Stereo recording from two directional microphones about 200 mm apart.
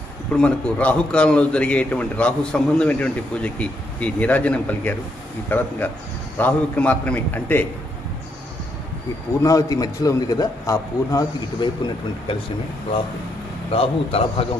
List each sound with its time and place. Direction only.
0.4 s a man's voice: 5° left (ahead or behind)
9.4 s a man's voice: 15° left (ahead or behind)
13.7 s a man's voice: 30° left (ahead or behind)